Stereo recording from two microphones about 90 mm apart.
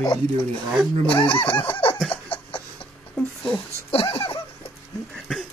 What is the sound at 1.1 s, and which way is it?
Speech, 65° left (ahead or behind).